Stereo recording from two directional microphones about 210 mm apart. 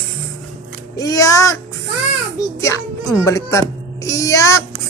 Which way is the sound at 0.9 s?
15° left (ahead or behind).